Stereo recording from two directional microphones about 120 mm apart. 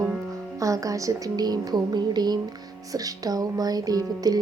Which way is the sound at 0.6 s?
30° right (ahead or behind).